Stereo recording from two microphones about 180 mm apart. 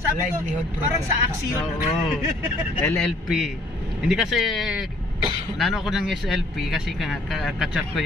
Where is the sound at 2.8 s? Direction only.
5° left (ahead or behind).